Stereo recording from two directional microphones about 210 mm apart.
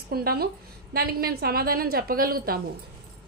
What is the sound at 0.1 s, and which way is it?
A woman's voice, 45° right (ahead or behind).